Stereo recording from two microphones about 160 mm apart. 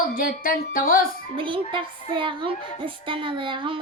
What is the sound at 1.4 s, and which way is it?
Speech, 30° right (ahead or behind).